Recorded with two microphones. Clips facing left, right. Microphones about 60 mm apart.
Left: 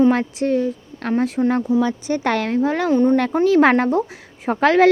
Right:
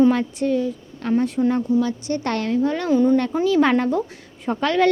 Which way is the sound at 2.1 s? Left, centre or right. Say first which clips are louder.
Left 2 dB; left.